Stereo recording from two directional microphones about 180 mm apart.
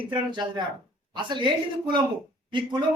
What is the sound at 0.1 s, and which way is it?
A man's voice, 25° right (ahead or behind).